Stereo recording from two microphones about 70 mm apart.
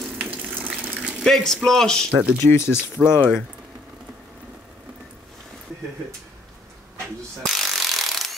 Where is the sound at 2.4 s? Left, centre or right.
Left.